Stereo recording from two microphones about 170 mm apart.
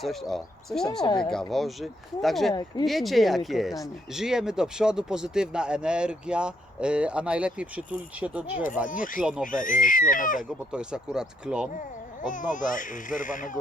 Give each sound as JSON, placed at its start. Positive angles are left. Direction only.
{"t": 0.0, "sound": "speech", "side_deg": 0}
{"t": 2.5, "sound": "speech", "side_deg": 25}
{"t": 2.8, "sound": "speech", "side_deg": 0}
{"t": 8.9, "sound": "speech", "side_deg": 50}
{"t": 10.7, "sound": "speech", "side_deg": -5}
{"t": 12.3, "sound": "speech", "side_deg": 50}